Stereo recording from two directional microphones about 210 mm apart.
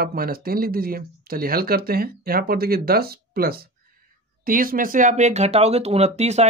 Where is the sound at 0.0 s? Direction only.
45° right (ahead or behind).